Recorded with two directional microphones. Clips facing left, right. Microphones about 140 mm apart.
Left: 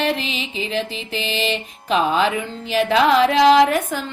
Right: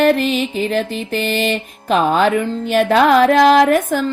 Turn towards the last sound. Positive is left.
turn(degrees=-45)  # may be behind; listen again after turning